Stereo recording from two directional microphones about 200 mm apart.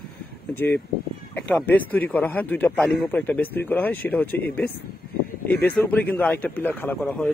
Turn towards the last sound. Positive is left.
turn(degrees=5)  # may be behind; listen again after turning